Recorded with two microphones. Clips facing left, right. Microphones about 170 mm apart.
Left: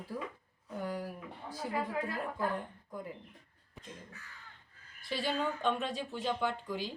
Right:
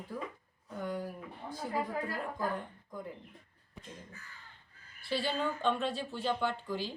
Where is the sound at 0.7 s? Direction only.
10° left (ahead or behind).